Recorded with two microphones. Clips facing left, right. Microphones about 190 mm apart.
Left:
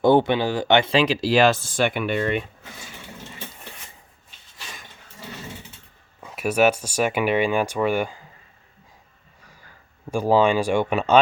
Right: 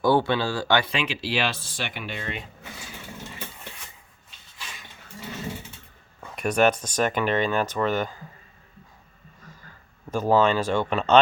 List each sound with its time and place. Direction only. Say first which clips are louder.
0.0 s speech: left 4 dB; 20° left (ahead or behind); by 2.4 s 60° left (ahead or behind)
6.1 s speech: left 2 dB; 5° left (ahead or behind)
10.1 s speech: left 2 dB; 10° left (ahead or behind)